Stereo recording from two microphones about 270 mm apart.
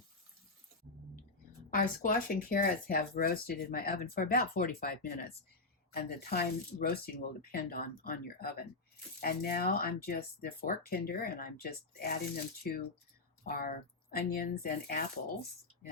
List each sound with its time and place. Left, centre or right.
1.7 s speech: left